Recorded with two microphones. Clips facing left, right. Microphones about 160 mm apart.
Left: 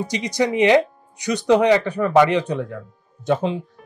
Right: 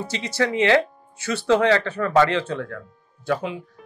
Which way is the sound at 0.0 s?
15° left (ahead or behind).